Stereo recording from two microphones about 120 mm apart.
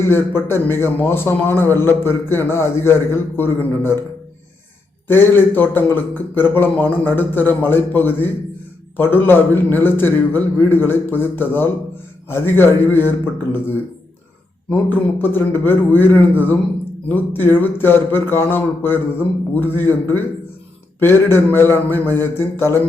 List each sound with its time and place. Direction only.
0.0 s a man's voice: 20° left (ahead or behind)
5.0 s a man's voice: 20° left (ahead or behind)
14.7 s a man's voice: 15° left (ahead or behind)